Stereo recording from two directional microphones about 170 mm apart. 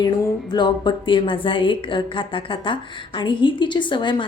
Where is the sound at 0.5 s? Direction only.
25° left (ahead or behind).